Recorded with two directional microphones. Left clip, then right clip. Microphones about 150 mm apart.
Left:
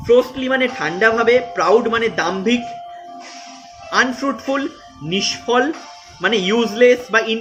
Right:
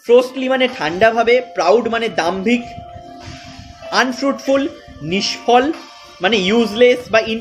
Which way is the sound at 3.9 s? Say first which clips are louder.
Right 1 dB; 25° right (ahead or behind).